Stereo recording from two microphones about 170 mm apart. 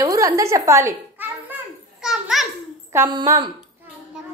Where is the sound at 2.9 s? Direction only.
15° right (ahead or behind).